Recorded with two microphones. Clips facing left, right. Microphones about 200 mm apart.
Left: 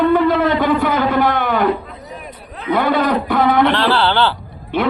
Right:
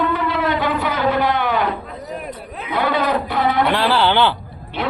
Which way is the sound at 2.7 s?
50° left (ahead or behind).